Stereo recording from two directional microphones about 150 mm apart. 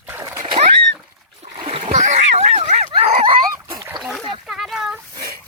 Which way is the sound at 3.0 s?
40° right (ahead or behind).